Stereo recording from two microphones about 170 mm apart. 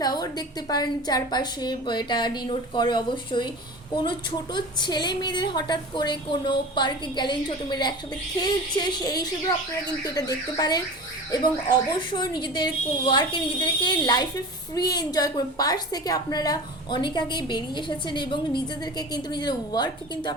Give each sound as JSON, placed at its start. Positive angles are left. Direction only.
{"t": 0.0, "sound": "a woman's voice", "side_deg": 25}
{"t": 4.5, "sound": "a woman's voice", "side_deg": 25}